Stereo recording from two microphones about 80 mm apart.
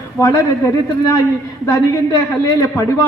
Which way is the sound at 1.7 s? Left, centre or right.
Left.